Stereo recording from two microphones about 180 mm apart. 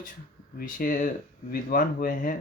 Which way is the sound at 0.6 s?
50° left (ahead or behind).